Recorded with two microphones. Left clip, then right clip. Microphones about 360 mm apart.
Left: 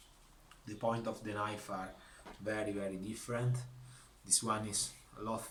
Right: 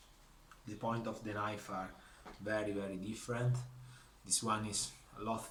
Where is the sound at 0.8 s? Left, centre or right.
Centre.